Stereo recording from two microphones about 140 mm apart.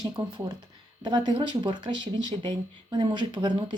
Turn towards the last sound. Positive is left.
turn(degrees=-35)  # may be behind; listen again after turning